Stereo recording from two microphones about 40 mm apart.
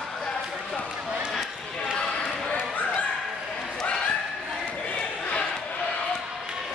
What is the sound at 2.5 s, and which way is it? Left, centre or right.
Dog, left.